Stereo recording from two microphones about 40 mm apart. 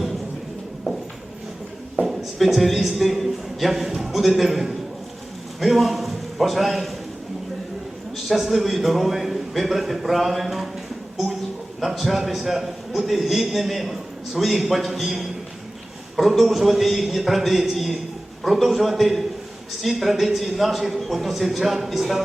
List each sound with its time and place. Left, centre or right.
2.4 s a man's voice: centre
8.1 s a man's voice: centre
11.8 s a man's voice: centre